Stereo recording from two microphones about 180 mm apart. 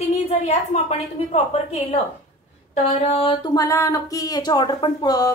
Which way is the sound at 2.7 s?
40° left (ahead or behind).